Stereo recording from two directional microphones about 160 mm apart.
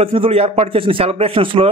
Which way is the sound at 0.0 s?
35° right (ahead or behind).